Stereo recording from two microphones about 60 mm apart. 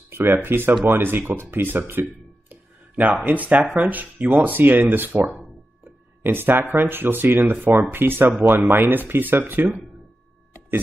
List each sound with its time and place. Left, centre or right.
0.1 s speech: right
2.5 s a sound: right
3.3 s speech: right